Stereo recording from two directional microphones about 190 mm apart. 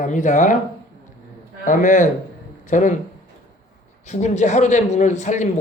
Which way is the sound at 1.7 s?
45° left (ahead or behind).